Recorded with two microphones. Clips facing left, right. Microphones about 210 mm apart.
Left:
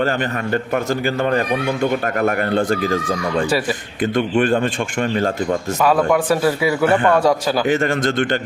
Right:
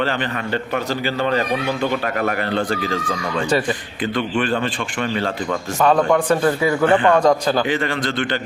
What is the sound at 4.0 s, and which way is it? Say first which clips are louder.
A man's voice: left 5 dB; 45° left (ahead or behind).